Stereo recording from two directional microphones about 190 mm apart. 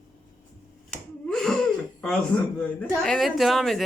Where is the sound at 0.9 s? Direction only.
5° left (ahead or behind).